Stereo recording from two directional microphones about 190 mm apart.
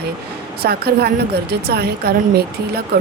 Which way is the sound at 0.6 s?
55° right (ahead or behind).